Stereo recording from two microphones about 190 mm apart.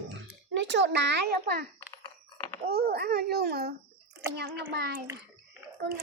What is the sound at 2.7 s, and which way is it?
A child's voice, 55° right (ahead or behind).